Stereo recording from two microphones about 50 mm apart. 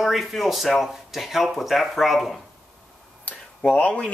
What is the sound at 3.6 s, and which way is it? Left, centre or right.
Speech, left.